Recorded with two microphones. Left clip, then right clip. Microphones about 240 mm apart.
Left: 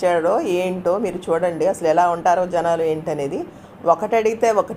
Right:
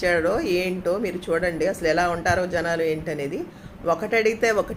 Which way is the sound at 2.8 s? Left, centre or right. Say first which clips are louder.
Left 4 dB; centre.